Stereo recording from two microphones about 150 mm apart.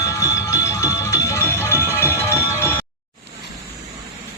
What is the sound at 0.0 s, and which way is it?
Music, 20° left (ahead or behind).